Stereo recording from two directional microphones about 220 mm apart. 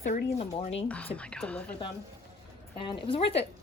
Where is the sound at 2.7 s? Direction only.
25° left (ahead or behind).